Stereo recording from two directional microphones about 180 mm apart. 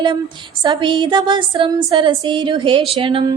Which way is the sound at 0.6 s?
25° right (ahead or behind).